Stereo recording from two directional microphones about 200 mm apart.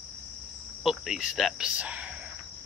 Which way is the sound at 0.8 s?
Centre (ahead or behind).